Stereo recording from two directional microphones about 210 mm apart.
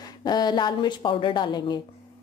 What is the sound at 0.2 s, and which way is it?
Speech, 20° left (ahead or behind).